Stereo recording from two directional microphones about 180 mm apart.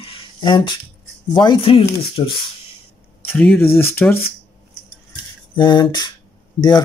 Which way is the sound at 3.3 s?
5° left (ahead or behind).